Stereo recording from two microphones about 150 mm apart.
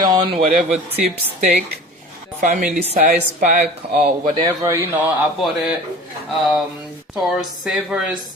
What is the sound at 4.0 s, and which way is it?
A man's voice, 40° right (ahead or behind).